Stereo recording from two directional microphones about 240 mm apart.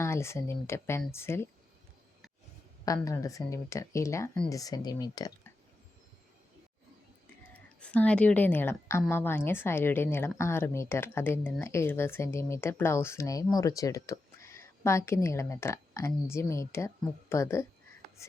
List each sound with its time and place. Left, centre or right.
0.0 s a woman's voice: centre
2.8 s a woman's voice: centre
7.5 s a woman's voice: centre